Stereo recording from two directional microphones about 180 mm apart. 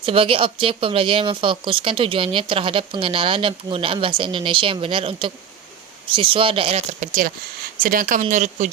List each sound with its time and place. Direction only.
0.0 s speech: 30° right (ahead or behind)